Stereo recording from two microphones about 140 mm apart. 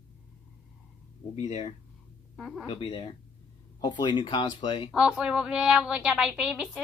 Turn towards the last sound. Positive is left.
turn(degrees=-5)  # may be behind; listen again after turning